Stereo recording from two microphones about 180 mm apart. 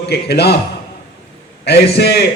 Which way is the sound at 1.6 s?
65° left (ahead or behind).